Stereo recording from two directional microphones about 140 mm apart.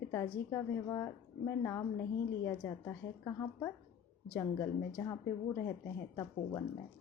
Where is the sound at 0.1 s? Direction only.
20° left (ahead or behind).